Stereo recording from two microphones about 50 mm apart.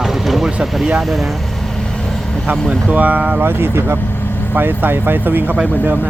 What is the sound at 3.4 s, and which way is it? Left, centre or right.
Speech, right.